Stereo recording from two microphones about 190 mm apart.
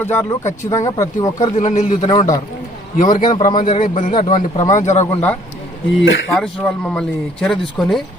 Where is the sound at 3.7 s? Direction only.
45° left (ahead or behind).